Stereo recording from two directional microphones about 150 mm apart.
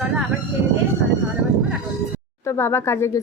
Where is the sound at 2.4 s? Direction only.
20° left (ahead or behind).